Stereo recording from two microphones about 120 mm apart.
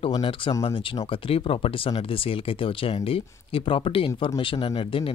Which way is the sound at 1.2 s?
50° left (ahead or behind).